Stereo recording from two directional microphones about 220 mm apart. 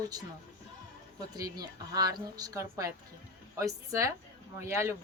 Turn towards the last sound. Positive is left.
turn(degrees=-10)  # may be behind; listen again after turning